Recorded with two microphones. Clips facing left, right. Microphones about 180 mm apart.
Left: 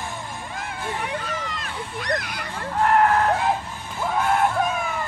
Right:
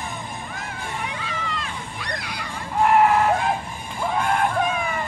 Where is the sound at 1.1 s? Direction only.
45° left (ahead or behind).